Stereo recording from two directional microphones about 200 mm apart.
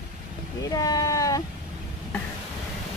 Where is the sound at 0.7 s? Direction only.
20° left (ahead or behind).